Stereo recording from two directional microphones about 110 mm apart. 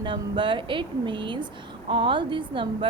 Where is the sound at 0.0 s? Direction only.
45° right (ahead or behind).